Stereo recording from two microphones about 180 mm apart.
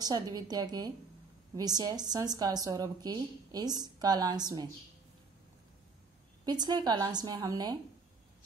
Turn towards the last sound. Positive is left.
turn(degrees=-20)  # may be behind; listen again after turning